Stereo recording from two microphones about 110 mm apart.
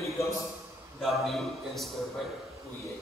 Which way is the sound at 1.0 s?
Centre (ahead or behind).